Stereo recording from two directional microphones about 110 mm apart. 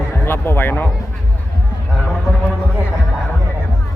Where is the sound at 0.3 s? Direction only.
20° left (ahead or behind).